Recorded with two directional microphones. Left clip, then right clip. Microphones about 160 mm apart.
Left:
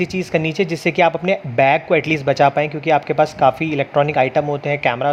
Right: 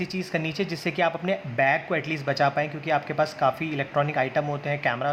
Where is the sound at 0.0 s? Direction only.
45° left (ahead or behind).